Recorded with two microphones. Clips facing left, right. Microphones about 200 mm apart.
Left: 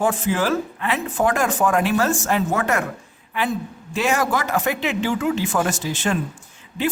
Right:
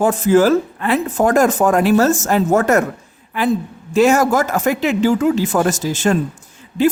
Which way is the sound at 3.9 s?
45° right (ahead or behind).